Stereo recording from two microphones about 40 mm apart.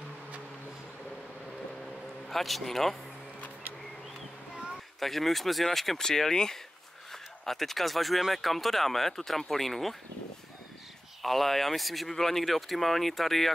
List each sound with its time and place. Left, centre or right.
2.2 s speech: centre
3.3 s music: left
5.0 s speech: centre
11.2 s speech: centre